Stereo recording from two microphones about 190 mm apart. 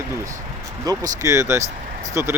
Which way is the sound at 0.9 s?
20° right (ahead or behind).